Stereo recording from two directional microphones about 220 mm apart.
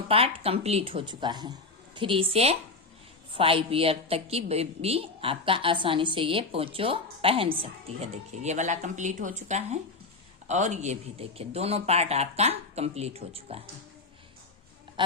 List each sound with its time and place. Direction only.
0.1 s a woman's voice: 25° right (ahead or behind)
15.0 s a woman's voice: 20° right (ahead or behind)